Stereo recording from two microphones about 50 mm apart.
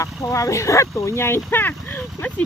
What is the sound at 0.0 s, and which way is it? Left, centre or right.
Speech, left.